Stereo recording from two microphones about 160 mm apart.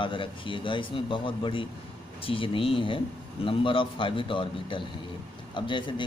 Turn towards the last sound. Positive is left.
turn(degrees=30)  # may be behind; listen again after turning